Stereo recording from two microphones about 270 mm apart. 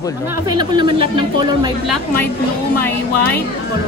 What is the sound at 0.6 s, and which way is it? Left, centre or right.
Speech, centre.